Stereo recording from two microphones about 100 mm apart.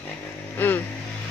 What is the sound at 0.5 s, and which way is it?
Speech, 20° left (ahead or behind).